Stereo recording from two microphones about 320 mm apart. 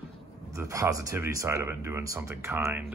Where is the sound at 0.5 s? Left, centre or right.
Centre.